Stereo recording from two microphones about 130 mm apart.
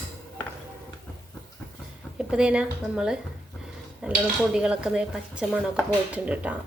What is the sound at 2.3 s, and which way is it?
Speech, 5° right (ahead or behind).